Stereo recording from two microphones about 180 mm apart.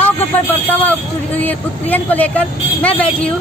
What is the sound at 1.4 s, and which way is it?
Speech, 10° left (ahead or behind).